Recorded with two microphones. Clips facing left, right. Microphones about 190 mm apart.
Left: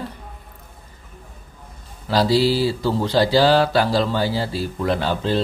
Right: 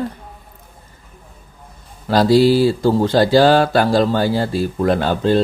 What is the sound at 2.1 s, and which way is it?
Speech, 50° right (ahead or behind).